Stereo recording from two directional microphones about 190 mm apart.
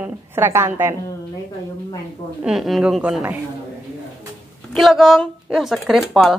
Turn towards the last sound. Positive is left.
turn(degrees=0)  # may be behind; listen again after turning